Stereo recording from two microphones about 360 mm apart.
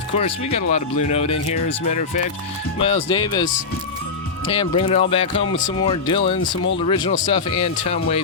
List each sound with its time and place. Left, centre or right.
0.1 s speech: centre